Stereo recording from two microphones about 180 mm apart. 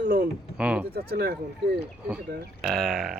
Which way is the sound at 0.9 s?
60° right (ahead or behind).